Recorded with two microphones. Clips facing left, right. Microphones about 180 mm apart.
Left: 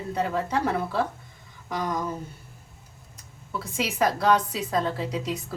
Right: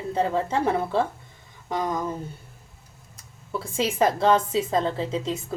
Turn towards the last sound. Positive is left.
turn(degrees=-25)  # may be behind; listen again after turning